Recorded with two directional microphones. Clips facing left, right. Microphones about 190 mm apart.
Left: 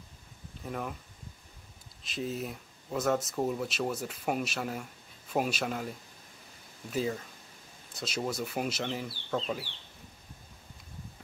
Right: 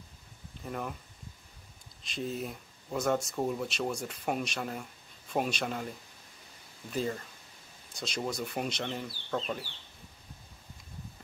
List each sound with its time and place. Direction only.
0.7 s speech: centre (ahead or behind)
2.0 s speech: centre (ahead or behind)